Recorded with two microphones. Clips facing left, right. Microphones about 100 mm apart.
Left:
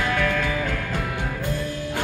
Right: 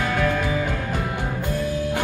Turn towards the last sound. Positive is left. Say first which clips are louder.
# right 2 dB
turn(degrees=-20)  # may be behind; listen again after turning